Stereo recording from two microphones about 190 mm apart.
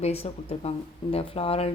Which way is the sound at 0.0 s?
30° left (ahead or behind).